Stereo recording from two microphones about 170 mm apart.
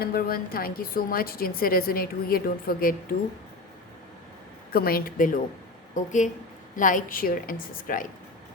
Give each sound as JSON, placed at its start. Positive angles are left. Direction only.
{"t": 0.0, "sound": "a woman's voice", "side_deg": 60}
{"t": 4.7, "sound": "a woman's voice", "side_deg": 60}